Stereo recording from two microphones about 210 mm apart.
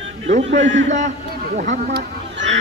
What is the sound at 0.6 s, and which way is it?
Speech, 60° right (ahead or behind).